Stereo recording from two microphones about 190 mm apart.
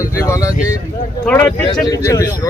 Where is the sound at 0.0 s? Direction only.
15° left (ahead or behind).